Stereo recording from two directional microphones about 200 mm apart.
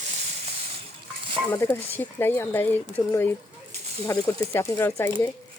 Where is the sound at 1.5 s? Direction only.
10° left (ahead or behind).